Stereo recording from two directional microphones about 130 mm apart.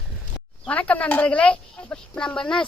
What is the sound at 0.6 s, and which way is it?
Speech, 10° left (ahead or behind).